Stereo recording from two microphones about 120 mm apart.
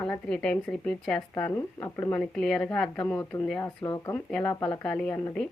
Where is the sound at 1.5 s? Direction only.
25° left (ahead or behind).